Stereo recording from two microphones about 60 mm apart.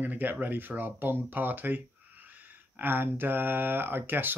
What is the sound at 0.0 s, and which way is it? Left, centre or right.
Speech, right.